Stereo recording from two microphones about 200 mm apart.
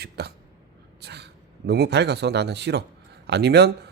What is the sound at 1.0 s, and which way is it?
Speech, 55° right (ahead or behind).